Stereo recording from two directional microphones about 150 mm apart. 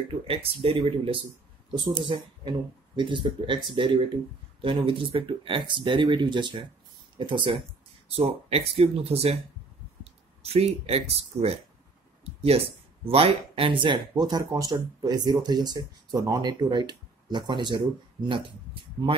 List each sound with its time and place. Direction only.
0.1 s speech: 40° right (ahead or behind)
10.4 s speech: 45° right (ahead or behind)
12.4 s speech: 40° right (ahead or behind)